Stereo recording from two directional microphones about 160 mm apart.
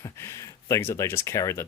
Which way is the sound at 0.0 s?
20° left (ahead or behind).